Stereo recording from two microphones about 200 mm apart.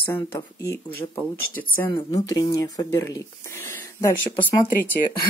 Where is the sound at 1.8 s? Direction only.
10° left (ahead or behind).